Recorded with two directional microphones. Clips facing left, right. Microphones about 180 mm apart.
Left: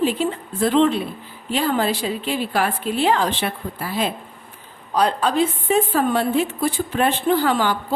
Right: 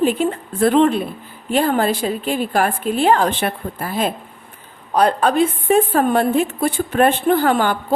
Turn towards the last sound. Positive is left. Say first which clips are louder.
# right 3 dB
turn(degrees=-50)  # may be behind; listen again after turning